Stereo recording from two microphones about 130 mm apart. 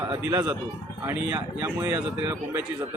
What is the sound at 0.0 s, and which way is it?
Speech, 30° right (ahead or behind).